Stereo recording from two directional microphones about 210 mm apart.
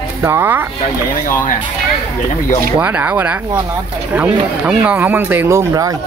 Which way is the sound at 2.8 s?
10° right (ahead or behind).